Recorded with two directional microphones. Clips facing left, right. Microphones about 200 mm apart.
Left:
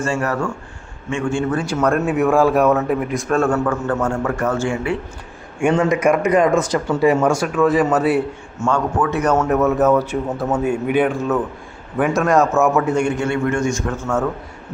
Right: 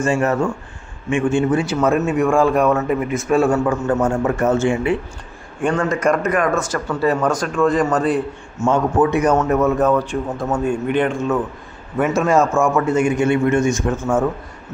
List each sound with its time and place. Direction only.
0.0 s a man's voice: 20° right (ahead or behind)
1.6 s speech: 5° right (ahead or behind); by 4.9 s 20° right (ahead or behind)
5.5 s speech: 10° left (ahead or behind)
8.6 s a man's voice: 20° right (ahead or behind)
9.4 s speech: centre (ahead or behind)
13.1 s a man's voice: 15° right (ahead or behind)